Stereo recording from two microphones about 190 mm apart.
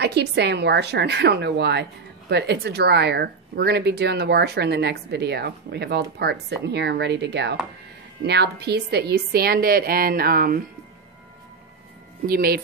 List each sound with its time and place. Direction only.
0.0 s a woman's voice: 60° right (ahead or behind)
12.3 s a woman's voice: 55° right (ahead or behind)